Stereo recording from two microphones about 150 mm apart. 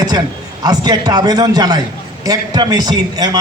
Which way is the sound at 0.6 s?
25° right (ahead or behind).